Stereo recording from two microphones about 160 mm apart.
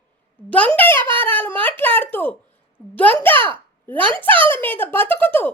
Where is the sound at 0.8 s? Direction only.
15° left (ahead or behind).